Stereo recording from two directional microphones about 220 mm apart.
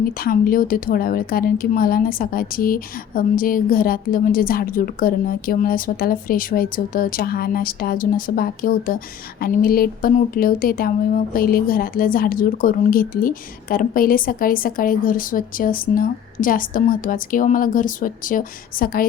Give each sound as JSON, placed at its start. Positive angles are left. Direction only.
{"t": 0.2, "sound": "speech", "side_deg": 40}